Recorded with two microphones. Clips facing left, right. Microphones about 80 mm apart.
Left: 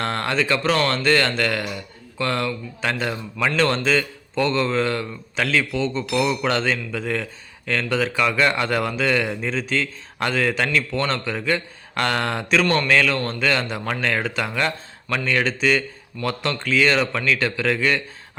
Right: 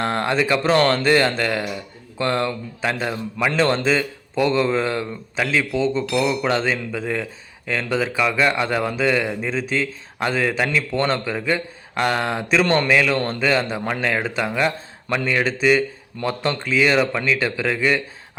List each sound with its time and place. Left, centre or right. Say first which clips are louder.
0.0 s a man's voice: right 2 dB; centre
2.8 s a man's voice: right 1 dB; centre
8.6 s a man's voice: right 1 dB; centre
12.6 s a man's voice: right 2 dB; right
12.9 s a man's voice: right 1 dB; centre
16.6 s a man's voice: right 1 dB; centre